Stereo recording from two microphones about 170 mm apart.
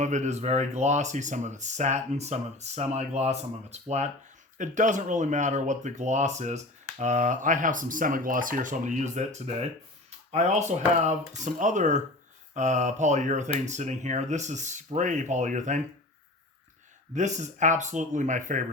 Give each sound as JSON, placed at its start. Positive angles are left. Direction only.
{"t": 0.0, "sound": "speech", "side_deg": -45}
{"t": 17.2, "sound": "speech", "side_deg": -45}